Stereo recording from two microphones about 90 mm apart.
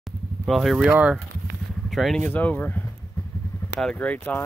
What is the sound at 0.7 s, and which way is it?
Speech, 15° right (ahead or behind).